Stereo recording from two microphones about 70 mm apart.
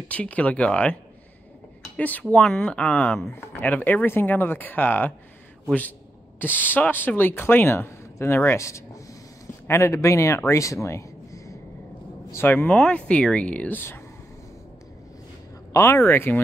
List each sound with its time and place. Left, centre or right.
0.1 s speech: centre
2.0 s speech: left
3.3 s speech: left
6.4 s speech: left
12.3 s speech: left
12.9 s speech: centre
13.7 s speech: left
15.7 s speech: left